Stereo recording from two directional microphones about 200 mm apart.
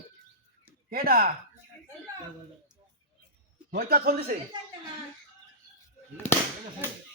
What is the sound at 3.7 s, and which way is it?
Speech, 50° right (ahead or behind).